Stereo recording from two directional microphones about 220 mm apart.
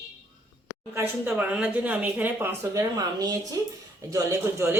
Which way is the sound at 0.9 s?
10° right (ahead or behind).